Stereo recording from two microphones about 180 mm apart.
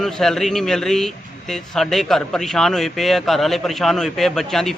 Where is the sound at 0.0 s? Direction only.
Centre (ahead or behind).